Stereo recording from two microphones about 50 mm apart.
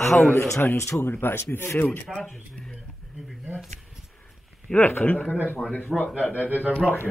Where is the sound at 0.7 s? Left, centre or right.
Left.